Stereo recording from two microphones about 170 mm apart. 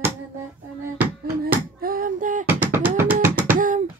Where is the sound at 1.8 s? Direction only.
55° right (ahead or behind).